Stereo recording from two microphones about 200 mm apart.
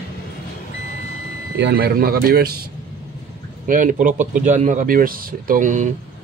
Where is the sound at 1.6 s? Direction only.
55° right (ahead or behind).